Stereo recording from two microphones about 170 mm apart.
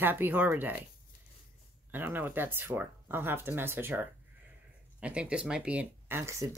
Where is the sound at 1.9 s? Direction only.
10° right (ahead or behind).